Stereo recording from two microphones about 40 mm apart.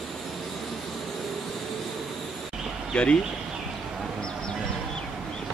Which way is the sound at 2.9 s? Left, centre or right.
Left.